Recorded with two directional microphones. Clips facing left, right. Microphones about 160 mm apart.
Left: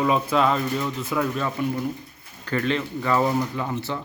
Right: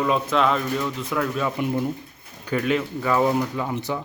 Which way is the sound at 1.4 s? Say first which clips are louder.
Right 2 dB; 15° right (ahead or behind).